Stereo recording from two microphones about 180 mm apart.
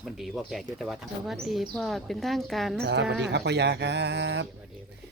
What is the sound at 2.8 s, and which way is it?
Speech, 70° right (ahead or behind).